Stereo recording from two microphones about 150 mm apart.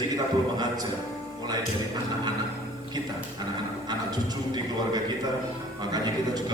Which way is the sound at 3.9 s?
25° right (ahead or behind).